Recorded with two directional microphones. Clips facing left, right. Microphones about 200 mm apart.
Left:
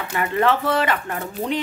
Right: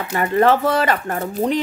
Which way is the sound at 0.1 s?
40° right (ahead or behind).